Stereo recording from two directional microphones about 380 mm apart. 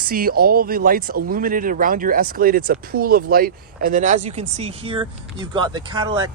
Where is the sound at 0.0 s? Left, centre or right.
Right.